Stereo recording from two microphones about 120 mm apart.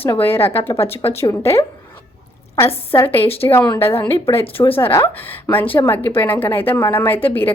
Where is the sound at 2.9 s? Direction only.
20° left (ahead or behind).